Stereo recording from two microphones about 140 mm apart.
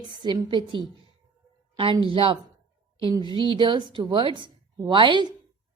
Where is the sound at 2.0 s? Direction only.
40° right (ahead or behind).